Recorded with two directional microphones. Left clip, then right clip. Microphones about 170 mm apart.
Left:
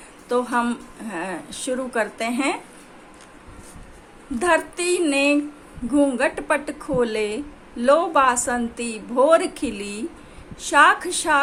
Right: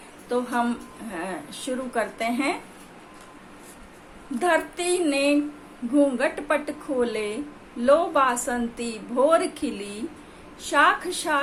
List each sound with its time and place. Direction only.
0.3 s a woman's voice: 25° left (ahead or behind)
4.4 s a woman's voice: 25° left (ahead or behind)